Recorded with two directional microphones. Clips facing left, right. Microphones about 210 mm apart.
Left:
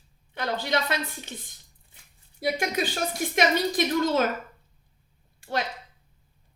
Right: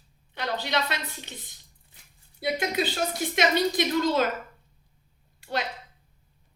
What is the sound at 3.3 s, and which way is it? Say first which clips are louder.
Speech: even; 50° left (ahead or behind).